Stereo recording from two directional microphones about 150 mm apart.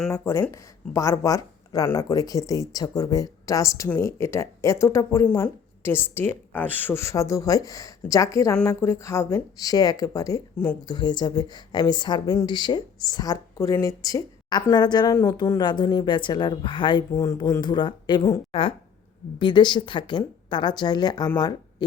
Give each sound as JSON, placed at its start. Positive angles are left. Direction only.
{"t": 0.1, "sound": "speech", "side_deg": 20}
{"t": 10.8, "sound": "speech", "side_deg": 30}
{"t": 17.2, "sound": "speech", "side_deg": 20}
{"t": 17.6, "sound": "speech", "side_deg": 30}
{"t": 19.4, "sound": "speech", "side_deg": 30}